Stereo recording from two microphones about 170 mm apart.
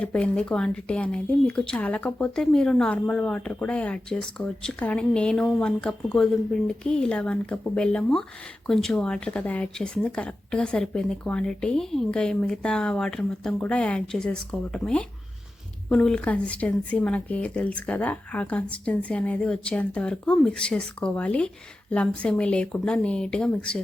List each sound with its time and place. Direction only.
0.0 s speech: 5° left (ahead or behind)